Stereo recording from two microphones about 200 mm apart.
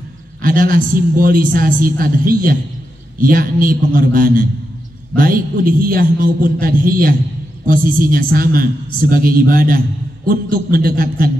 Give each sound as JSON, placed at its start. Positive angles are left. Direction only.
{"t": 0.4, "sound": "a man's voice", "side_deg": -45}